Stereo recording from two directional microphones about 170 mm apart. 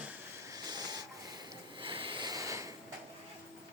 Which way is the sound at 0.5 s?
20° right (ahead or behind).